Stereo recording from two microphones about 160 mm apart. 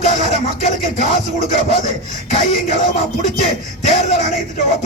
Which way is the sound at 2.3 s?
45° left (ahead or behind).